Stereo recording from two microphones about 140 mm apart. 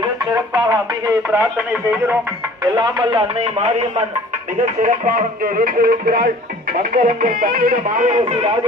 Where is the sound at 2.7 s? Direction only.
35° right (ahead or behind).